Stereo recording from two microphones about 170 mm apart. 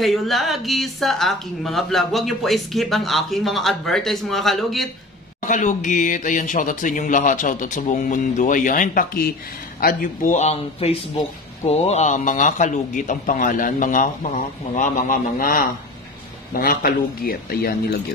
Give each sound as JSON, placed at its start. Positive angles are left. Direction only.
{"t": 0.0, "sound": "a woman's voice", "side_deg": 0}
{"t": 5.4, "sound": "a man's voice", "side_deg": 45}